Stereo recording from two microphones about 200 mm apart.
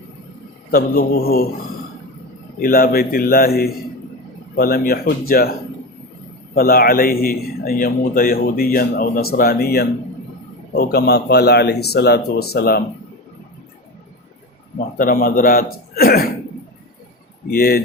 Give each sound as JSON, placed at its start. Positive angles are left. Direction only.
{"t": 0.7, "sound": "a man's voice", "side_deg": 50}
{"t": 2.6, "sound": "a man's voice", "side_deg": 50}
{"t": 14.8, "sound": "a man's voice", "side_deg": 45}
{"t": 17.5, "sound": "a man's voice", "side_deg": 50}